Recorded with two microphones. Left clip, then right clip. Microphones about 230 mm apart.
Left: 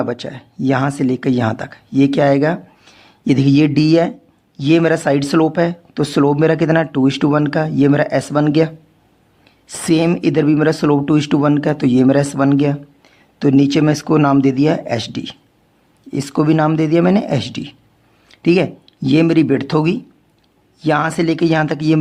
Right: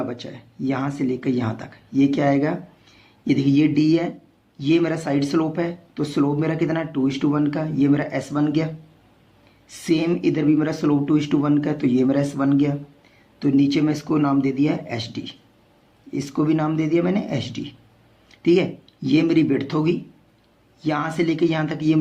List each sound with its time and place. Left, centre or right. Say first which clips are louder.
0.0 s speech: left 8 dB; left